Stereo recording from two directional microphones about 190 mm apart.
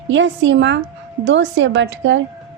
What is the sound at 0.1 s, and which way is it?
A woman's voice, 75° right (ahead or behind).